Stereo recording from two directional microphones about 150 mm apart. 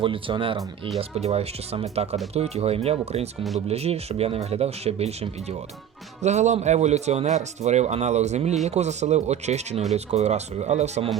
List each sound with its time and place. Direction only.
0.0 s a man's voice: 35° right (ahead or behind)